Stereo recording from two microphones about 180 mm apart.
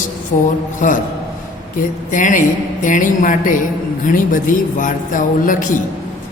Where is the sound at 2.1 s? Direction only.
45° left (ahead or behind).